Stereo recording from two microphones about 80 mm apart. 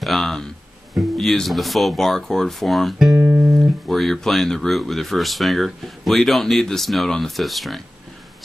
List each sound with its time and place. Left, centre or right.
0.0 s speech: centre
3.2 s music: right
3.4 s speech: centre